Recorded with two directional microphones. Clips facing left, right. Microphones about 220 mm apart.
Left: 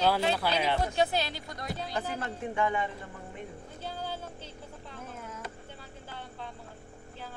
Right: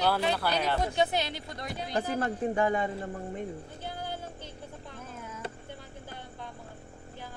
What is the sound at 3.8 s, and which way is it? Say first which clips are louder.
Music: left 1 dB; 15° right (ahead or behind).